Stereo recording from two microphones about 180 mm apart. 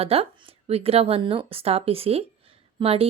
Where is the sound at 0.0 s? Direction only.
30° right (ahead or behind).